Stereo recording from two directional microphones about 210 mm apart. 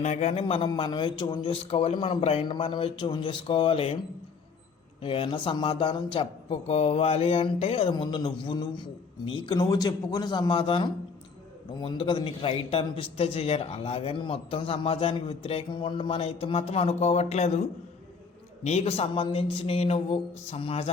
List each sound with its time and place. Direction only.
0.0 s a man's voice: 30° left (ahead or behind)
5.0 s a man's voice: 25° left (ahead or behind)